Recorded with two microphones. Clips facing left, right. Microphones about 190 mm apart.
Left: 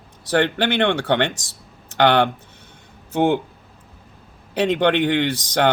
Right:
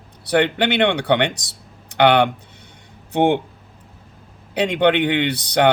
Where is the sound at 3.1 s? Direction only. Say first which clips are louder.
Right 1 dB; 60° right (ahead or behind).